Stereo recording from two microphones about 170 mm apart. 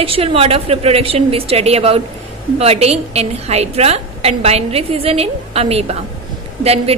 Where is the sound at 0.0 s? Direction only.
35° right (ahead or behind).